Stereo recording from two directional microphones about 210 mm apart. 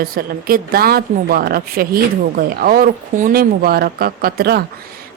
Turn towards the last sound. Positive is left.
turn(degrees=-45)  # may be behind; listen again after turning